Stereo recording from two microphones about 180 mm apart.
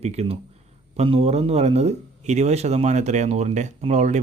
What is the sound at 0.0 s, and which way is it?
Speech, 35° right (ahead or behind).